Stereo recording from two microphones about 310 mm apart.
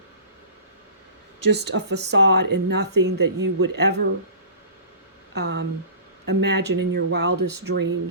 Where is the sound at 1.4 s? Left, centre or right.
Right.